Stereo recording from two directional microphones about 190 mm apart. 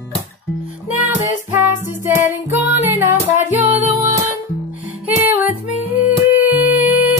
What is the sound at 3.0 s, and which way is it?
Music, 40° left (ahead or behind).